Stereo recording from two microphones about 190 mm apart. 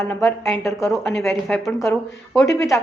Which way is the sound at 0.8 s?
15° left (ahead or behind).